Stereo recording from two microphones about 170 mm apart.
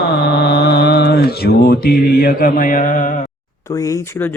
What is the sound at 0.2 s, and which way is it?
Mantra, 75° left (ahead or behind).